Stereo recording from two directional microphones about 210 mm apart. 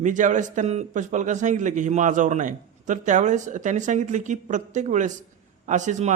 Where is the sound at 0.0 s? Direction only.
35° right (ahead or behind).